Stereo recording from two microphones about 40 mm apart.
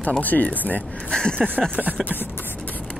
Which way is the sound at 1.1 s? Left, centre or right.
Centre.